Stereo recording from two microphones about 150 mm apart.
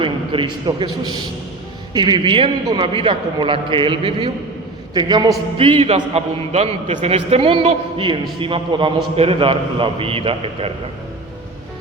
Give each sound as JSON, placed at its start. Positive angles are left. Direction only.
{"t": 0.0, "sound": "a man's voice", "side_deg": -35}